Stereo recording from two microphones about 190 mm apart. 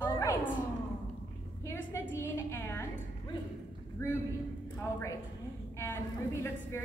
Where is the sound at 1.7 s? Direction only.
15° left (ahead or behind).